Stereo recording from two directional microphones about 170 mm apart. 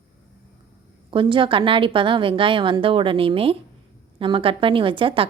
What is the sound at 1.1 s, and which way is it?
A woman's voice, 30° right (ahead or behind).